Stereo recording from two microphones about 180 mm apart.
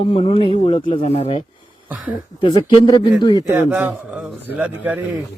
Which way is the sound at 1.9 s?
10° right (ahead or behind).